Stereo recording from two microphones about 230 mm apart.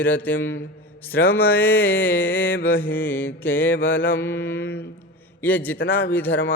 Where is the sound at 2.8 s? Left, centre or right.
Centre.